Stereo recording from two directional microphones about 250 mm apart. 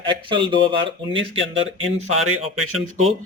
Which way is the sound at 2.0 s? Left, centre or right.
Right.